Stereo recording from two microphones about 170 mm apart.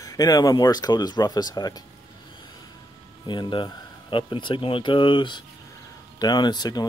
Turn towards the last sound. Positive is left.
turn(degrees=25)  # may be behind; listen again after turning